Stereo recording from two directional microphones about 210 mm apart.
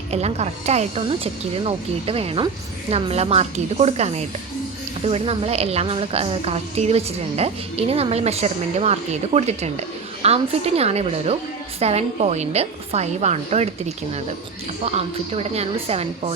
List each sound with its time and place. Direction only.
0.1 s a woman's voice: 30° right (ahead or behind)